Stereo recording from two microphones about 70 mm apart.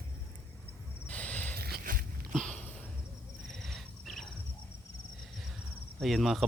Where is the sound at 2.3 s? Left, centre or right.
Centre.